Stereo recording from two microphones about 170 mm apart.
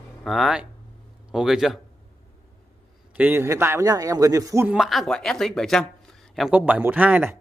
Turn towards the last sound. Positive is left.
turn(degrees=-10)  # may be behind; listen again after turning